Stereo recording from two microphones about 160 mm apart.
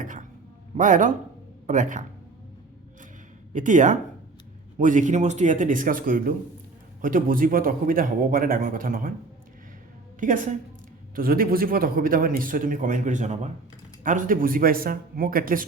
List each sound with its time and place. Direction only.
0.0 s a sound: 55° right (ahead or behind)
0.8 s a man's voice: 55° right (ahead or behind)
3.5 s a man's voice: 50° right (ahead or behind)
10.2 s a man's voice: 55° right (ahead or behind)